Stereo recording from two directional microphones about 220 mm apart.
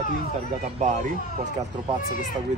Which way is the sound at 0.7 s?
30° right (ahead or behind).